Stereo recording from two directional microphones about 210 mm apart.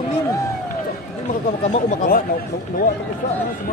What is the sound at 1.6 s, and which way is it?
Speech, 45° left (ahead or behind).